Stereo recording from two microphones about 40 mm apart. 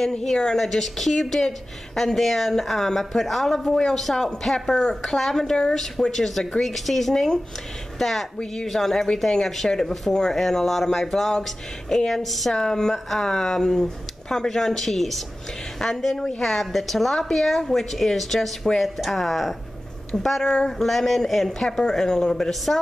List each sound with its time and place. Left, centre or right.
0.1 s a woman's voice: centre
12.5 s a woman's voice: centre